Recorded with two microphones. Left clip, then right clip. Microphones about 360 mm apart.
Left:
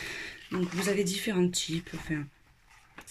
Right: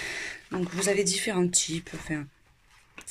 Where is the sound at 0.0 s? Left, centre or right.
Centre.